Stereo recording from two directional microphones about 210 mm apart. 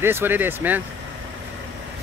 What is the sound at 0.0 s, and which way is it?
Speech, 10° right (ahead or behind).